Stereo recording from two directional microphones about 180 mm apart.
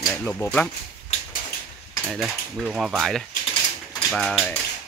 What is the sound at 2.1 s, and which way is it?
Speech, 5° right (ahead or behind).